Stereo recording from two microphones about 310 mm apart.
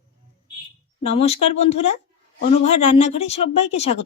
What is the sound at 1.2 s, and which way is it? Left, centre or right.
Speech, centre.